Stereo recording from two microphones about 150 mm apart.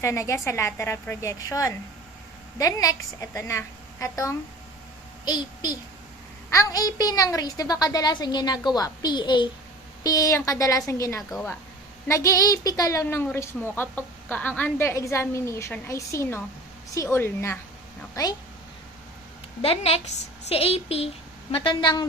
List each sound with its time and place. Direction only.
0.0 s a woman's voice: 20° left (ahead or behind)
11.2 s a woman's voice: centre (ahead or behind)
12.0 s a woman's voice: 20° left (ahead or behind)
19.6 s speech: 40° left (ahead or behind)